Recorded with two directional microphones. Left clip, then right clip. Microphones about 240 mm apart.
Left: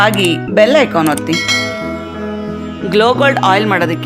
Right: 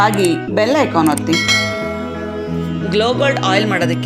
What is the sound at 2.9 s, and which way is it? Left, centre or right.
Speech, left.